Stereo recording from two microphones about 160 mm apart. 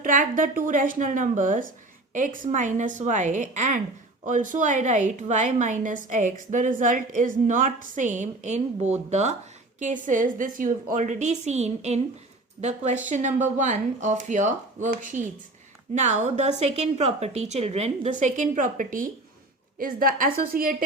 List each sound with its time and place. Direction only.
0.0 s a woman's voice: 55° right (ahead or behind)